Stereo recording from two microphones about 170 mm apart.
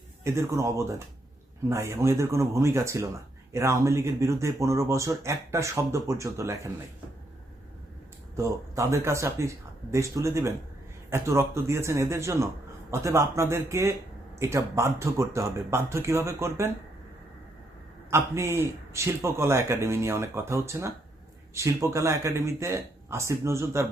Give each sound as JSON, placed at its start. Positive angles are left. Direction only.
{"t": 0.3, "sound": "speech", "side_deg": -15}
{"t": 8.4, "sound": "speech", "side_deg": -15}
{"t": 18.1, "sound": "speech", "side_deg": -15}